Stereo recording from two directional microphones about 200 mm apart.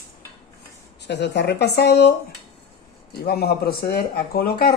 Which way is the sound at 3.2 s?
50° left (ahead or behind).